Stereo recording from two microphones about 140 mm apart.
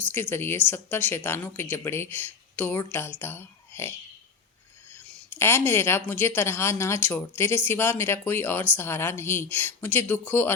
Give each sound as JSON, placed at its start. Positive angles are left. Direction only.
{"t": 0.1, "sound": "speech", "side_deg": 15}
{"t": 4.9, "sound": "speech", "side_deg": 15}